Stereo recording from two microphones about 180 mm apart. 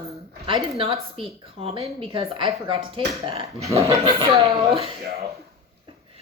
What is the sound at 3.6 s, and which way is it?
Speech, 15° right (ahead or behind).